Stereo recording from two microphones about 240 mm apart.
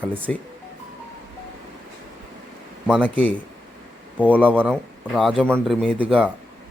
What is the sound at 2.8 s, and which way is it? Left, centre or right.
Speech, centre.